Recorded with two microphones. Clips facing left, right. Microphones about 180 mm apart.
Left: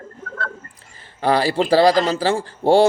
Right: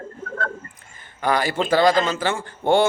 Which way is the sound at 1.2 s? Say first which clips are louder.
Left 4 dB; 30° left (ahead or behind).